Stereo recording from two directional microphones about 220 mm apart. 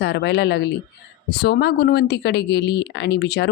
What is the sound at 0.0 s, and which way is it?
Speech, 50° left (ahead or behind).